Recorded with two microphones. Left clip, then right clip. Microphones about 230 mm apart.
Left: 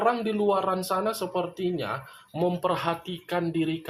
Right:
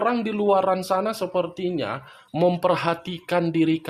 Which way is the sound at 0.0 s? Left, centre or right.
Right.